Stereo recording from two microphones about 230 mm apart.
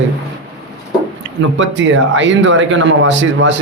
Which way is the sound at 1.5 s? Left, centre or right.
Right.